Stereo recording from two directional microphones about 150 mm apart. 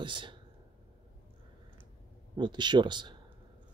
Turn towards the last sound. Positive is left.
turn(degrees=-30)  # may be behind; listen again after turning